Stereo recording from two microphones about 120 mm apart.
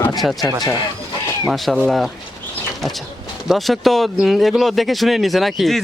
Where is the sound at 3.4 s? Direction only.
Centre (ahead or behind).